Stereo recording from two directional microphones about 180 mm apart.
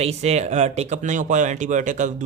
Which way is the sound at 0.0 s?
35° right (ahead or behind).